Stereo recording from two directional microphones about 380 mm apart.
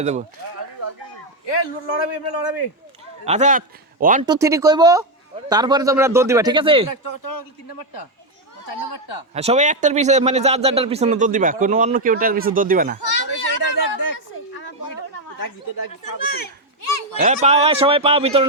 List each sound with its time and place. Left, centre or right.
0.0 s speech: centre
1.5 s a man's voice: left
3.2 s speech: centre
7.0 s speech: left
8.8 s speech: left
9.3 s a man's voice: centre
13.0 s a sound: left
14.0 s a sound: left
16.2 s a child's voice: left
17.2 s speech: centre